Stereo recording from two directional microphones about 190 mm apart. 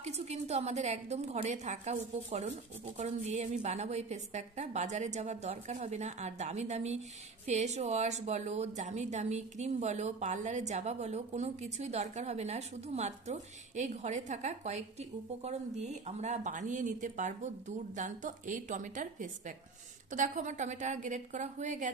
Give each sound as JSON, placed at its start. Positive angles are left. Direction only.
{"t": 0.0, "sound": "a woman's voice", "side_deg": -35}